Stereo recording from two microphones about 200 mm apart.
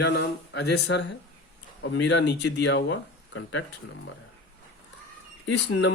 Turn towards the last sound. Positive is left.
turn(degrees=65)  # may be behind; listen again after turning